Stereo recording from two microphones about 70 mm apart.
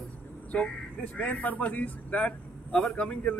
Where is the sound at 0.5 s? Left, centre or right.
Centre.